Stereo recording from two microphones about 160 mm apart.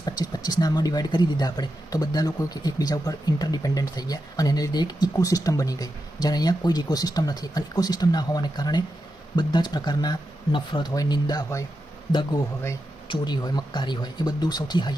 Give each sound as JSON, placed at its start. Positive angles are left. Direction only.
{"t": 0.0, "sound": "speech", "side_deg": 25}
{"t": 13.1, "sound": "speech", "side_deg": 25}